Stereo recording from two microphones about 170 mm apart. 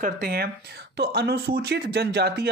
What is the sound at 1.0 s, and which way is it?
Speech, 75° right (ahead or behind).